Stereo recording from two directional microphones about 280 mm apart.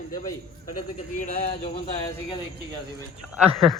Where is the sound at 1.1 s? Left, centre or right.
Centre.